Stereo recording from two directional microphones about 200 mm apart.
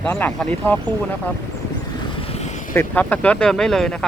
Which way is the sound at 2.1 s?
30° left (ahead or behind).